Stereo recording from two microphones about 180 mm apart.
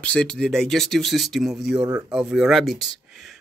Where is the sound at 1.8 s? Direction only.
15° right (ahead or behind).